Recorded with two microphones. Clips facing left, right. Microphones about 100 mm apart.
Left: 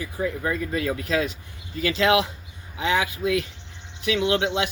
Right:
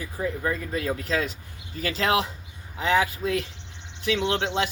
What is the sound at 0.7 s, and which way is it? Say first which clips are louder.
Speech: left 3 dB; 35° right (ahead or behind).